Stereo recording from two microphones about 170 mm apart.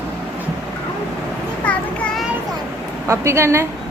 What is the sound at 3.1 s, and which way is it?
Speech, 15° right (ahead or behind).